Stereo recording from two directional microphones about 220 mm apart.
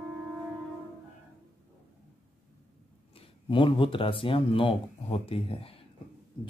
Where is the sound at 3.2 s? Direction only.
25° left (ahead or behind).